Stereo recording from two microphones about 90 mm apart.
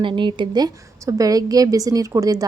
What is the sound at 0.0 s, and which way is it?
A woman's voice, 65° right (ahead or behind).